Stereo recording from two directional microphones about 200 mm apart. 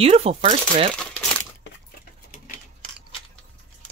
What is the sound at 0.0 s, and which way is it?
Speech, 30° right (ahead or behind).